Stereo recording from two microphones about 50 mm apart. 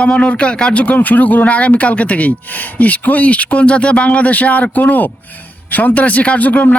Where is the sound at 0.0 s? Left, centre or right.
Left.